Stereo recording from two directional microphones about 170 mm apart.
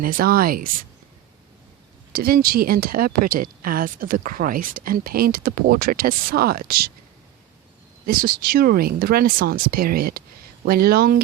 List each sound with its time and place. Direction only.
0.0 s speech: 60° right (ahead or behind)
2.1 s speech: 60° right (ahead or behind)
8.0 s speech: 55° right (ahead or behind)